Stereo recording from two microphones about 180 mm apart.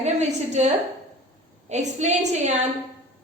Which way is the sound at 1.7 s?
40° right (ahead or behind).